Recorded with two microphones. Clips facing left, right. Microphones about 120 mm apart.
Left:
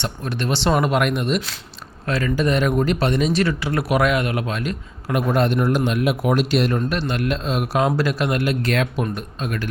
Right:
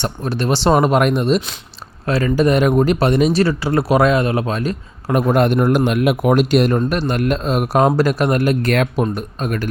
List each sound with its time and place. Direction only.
0.0 s speech: 35° right (ahead or behind)
5.3 s a man's voice: 50° right (ahead or behind)